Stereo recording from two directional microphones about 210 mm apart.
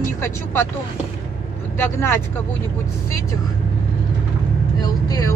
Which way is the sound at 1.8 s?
10° left (ahead or behind).